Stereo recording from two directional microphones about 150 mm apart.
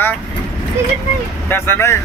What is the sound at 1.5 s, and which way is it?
Speech, 15° left (ahead or behind).